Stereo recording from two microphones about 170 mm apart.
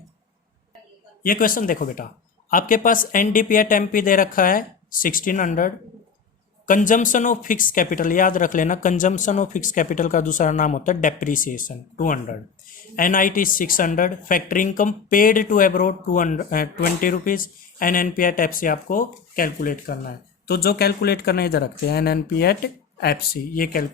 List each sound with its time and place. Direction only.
1.2 s speech: 55° left (ahead or behind)
20.5 s speech: 65° left (ahead or behind)